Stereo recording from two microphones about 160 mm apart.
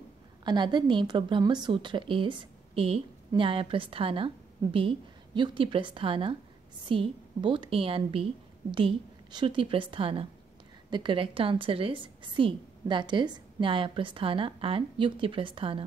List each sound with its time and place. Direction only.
0.4 s a woman's voice: 30° right (ahead or behind)